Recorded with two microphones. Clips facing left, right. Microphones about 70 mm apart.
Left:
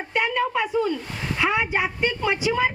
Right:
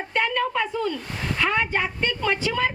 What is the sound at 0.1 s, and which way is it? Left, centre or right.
A woman's voice, centre.